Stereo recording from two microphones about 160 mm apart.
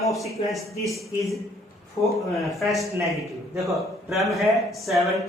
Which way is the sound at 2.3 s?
Centre (ahead or behind).